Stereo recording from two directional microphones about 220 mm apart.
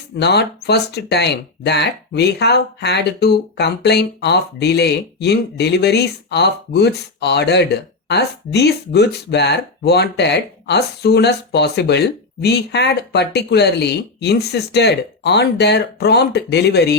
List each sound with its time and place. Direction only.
0.2 s speech: 50° left (ahead or behind)